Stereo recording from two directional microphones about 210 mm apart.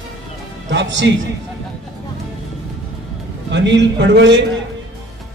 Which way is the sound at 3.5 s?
55° right (ahead or behind).